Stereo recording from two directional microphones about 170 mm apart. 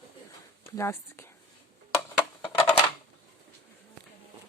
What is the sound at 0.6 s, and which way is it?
Speech, 15° left (ahead or behind).